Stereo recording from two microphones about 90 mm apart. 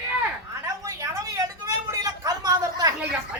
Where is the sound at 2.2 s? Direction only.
45° right (ahead or behind).